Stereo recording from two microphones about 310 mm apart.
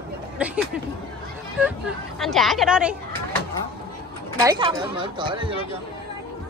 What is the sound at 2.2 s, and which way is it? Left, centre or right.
Speech, centre.